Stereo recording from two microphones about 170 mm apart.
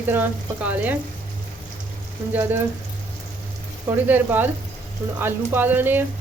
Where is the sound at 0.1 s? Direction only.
10° right (ahead or behind).